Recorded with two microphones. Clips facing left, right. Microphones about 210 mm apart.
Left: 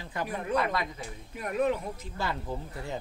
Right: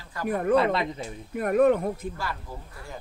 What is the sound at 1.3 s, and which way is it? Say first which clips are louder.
Speech: right 8 dB; 55° right (ahead or behind).